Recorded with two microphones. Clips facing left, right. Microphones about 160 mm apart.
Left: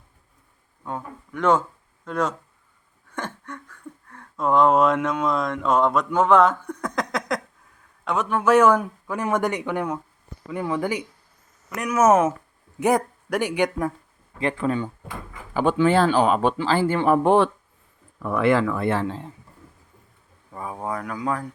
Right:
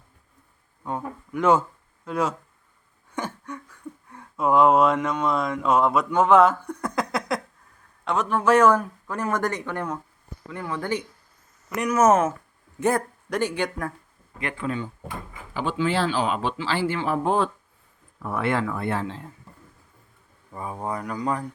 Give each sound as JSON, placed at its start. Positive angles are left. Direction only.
{"t": 0.9, "sound": "a man's voice", "side_deg": -5}
{"t": 14.3, "sound": "speech", "side_deg": 35}
{"t": 15.5, "sound": "speech", "side_deg": 55}
{"t": 18.5, "sound": "speech", "side_deg": 90}
{"t": 20.5, "sound": "speech", "side_deg": 0}